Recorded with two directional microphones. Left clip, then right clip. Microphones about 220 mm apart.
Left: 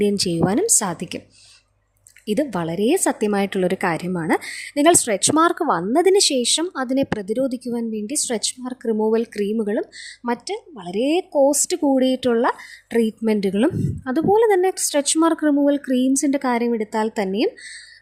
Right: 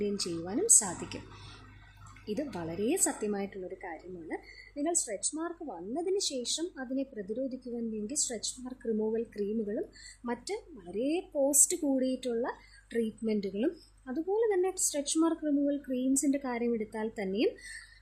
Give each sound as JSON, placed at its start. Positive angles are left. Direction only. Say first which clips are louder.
{"t": 0.0, "sound": "a woman's voice", "louder": "left 15 dB", "side_deg": 40}
{"t": 2.2, "sound": "a woman's voice", "louder": "left 14 dB", "side_deg": 40}